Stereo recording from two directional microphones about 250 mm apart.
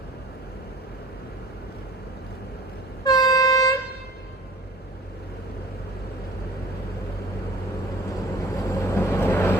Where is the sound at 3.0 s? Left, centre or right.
Centre.